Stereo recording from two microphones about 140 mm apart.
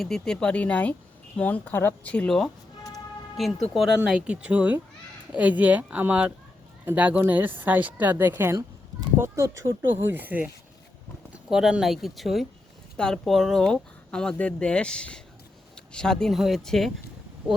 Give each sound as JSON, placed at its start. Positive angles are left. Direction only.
{"t": 0.0, "sound": "speech", "side_deg": 5}